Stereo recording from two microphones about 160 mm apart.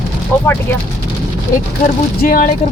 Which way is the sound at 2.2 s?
65° left (ahead or behind).